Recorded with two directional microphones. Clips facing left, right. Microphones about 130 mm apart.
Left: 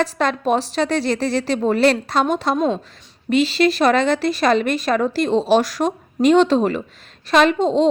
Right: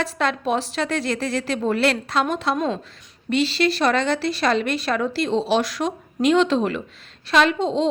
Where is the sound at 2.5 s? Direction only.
25° left (ahead or behind).